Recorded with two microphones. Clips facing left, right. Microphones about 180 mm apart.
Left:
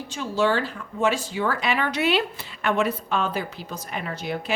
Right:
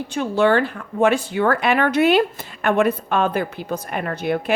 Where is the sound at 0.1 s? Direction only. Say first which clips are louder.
Right 6 dB; 60° right (ahead or behind).